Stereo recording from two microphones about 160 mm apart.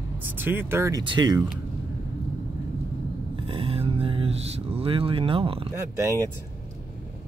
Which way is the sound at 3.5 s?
35° right (ahead or behind).